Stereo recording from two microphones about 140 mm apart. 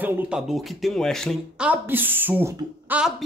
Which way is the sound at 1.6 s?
10° right (ahead or behind).